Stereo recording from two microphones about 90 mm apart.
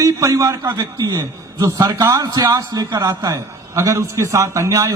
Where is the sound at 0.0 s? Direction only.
35° right (ahead or behind).